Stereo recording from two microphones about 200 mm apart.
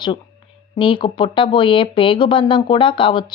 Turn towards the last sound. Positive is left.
turn(degrees=25)  # may be behind; listen again after turning